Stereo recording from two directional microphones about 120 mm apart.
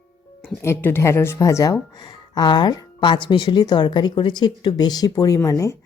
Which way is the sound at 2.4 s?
40° left (ahead or behind).